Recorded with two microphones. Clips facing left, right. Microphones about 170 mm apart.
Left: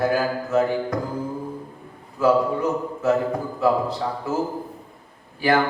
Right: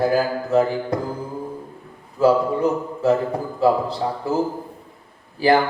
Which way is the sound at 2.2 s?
30° right (ahead or behind).